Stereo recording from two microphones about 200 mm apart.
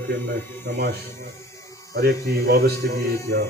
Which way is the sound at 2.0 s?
50° right (ahead or behind).